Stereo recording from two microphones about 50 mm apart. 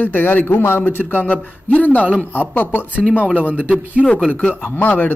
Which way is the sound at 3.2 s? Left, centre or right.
Right.